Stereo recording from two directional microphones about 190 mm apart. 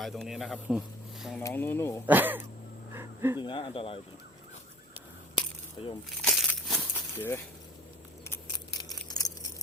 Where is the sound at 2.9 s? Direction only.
15° right (ahead or behind).